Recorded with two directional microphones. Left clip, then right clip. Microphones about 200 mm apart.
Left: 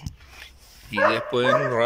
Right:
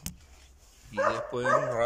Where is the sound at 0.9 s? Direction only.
Centre (ahead or behind).